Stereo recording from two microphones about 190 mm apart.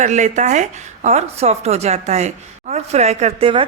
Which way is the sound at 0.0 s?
40° right (ahead or behind).